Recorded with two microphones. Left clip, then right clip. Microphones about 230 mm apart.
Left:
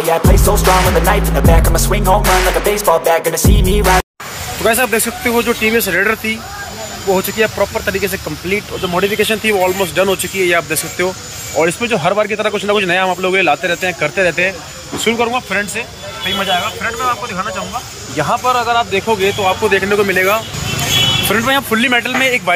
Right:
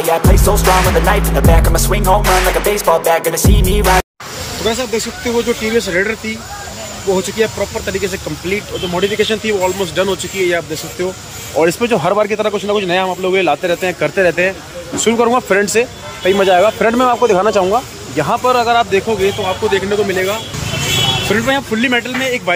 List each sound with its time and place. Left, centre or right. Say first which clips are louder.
0.0 s speech: even; centre
11.5 s speech: right 1 dB; centre; by 17.6 s right
18.1 s speech: right 1 dB; centre